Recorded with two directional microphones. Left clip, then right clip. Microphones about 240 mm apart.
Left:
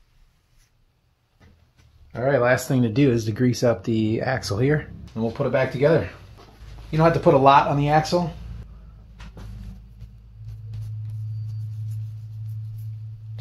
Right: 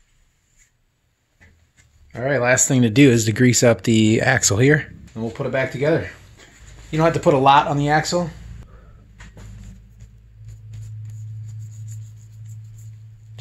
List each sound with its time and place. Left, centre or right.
2.1 s speech: right
5.1 s speech: centre